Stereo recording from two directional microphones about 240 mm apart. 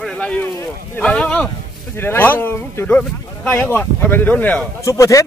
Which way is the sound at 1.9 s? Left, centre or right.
Centre.